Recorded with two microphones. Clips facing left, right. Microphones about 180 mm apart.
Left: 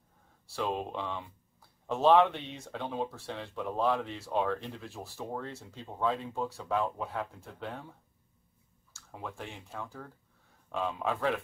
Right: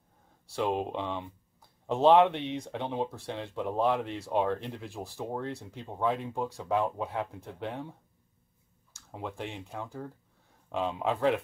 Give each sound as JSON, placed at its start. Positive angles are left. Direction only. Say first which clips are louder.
{"t": 0.6, "sound": "speech", "louder": "right 4 dB", "side_deg": -15}
{"t": 8.9, "sound": "speech", "louder": "right 4 dB", "side_deg": -20}